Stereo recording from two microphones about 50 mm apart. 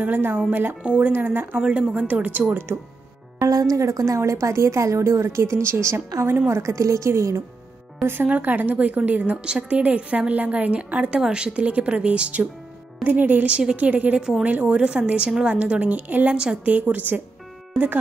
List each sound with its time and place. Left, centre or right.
0.0 s a woman's voice: right
1.7 s a woman's voice: right
2.7 s a woman's voice: right
6.6 s a woman's voice: right
8.0 s a woman's voice: right
8.3 s a woman's voice: right
13.5 s a woman's voice: centre; by 17.2 s right